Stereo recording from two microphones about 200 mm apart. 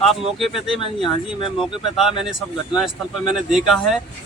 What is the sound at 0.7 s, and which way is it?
Speech, 25° left (ahead or behind).